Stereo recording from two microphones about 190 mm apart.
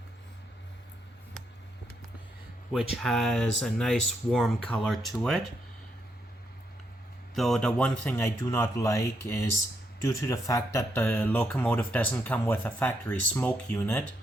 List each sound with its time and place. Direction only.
2.7 s speech: centre (ahead or behind)
7.3 s speech: centre (ahead or behind)